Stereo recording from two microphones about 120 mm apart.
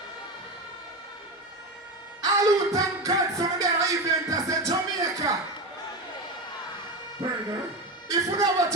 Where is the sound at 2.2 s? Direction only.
30° right (ahead or behind).